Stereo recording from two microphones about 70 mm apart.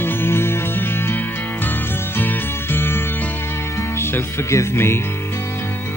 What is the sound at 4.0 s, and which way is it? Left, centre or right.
Music, left.